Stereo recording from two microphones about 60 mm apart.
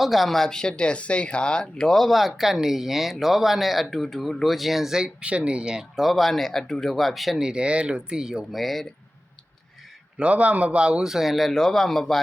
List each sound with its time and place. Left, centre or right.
0.0 s speech: centre
6.0 s speech: centre
7.4 s speech: centre
10.2 s a man's voice: right
11.1 s speech: centre